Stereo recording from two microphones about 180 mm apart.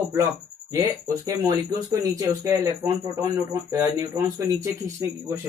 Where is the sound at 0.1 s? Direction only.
15° right (ahead or behind).